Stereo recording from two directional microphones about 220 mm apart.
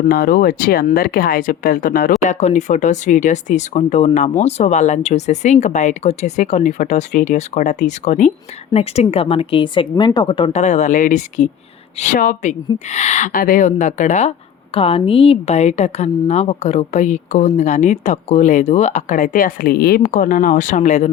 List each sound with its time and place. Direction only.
0.1 s a woman's voice: 40° left (ahead or behind)